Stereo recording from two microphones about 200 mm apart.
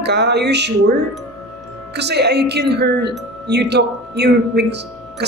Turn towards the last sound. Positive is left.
turn(degrees=-55)  # may be behind; listen again after turning